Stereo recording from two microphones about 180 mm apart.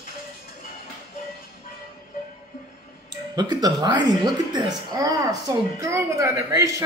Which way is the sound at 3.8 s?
25° right (ahead or behind).